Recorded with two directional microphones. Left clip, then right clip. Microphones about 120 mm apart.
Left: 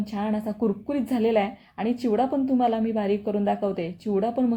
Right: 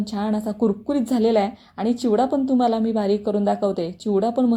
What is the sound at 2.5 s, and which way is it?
A woman's voice, 25° right (ahead or behind).